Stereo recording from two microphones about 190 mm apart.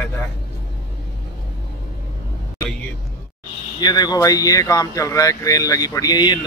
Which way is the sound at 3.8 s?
20° left (ahead or behind).